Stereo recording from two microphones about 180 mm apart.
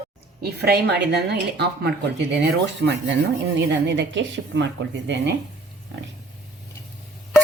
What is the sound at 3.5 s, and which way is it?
A woman's voice, 75° right (ahead or behind).